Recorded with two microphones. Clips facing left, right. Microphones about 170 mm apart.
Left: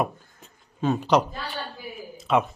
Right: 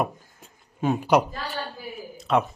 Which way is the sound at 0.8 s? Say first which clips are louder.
Right 1 dB; 10° right (ahead or behind).